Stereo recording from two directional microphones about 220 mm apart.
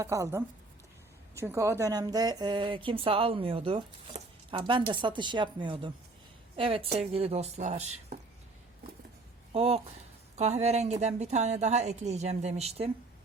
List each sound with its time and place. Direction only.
0.0 s speech: 15° right (ahead or behind); by 8.2 s 30° right (ahead or behind)
9.5 s a woman's voice: 25° right (ahead or behind)